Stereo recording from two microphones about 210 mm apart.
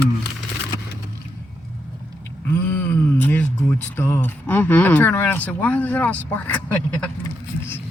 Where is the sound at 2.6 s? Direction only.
10° left (ahead or behind).